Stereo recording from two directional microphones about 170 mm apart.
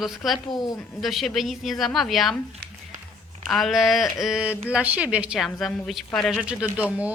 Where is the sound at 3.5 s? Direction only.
Centre (ahead or behind).